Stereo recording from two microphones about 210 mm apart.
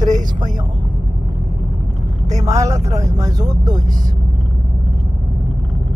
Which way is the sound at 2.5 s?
15° right (ahead or behind).